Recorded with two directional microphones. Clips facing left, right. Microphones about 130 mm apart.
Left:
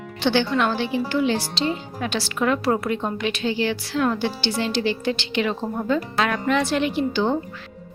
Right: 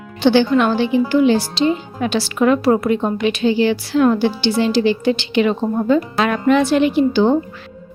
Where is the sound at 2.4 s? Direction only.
20° right (ahead or behind).